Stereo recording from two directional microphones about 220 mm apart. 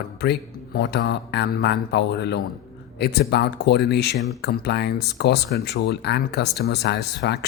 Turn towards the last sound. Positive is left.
turn(degrees=50)  # may be behind; listen again after turning